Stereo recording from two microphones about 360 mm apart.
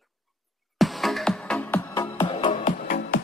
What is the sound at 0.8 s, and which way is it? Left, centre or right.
Music, centre.